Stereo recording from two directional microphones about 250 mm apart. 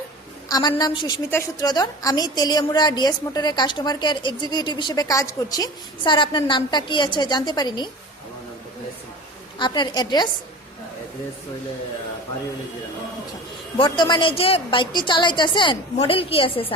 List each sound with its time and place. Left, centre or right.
0.5 s a woman's voice: centre
9.6 s a woman's voice: centre
13.7 s a woman's voice: centre